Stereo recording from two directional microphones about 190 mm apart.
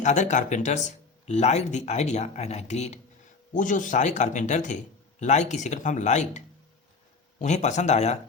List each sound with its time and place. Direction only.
0.0 s speech: 40° left (ahead or behind)